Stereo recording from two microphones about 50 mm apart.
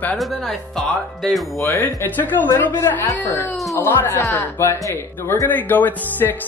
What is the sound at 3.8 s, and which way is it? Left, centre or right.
Speech, left.